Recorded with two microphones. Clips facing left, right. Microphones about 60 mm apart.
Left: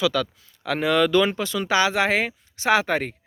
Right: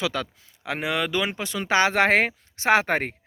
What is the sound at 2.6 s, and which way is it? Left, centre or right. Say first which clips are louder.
Speech: even; right.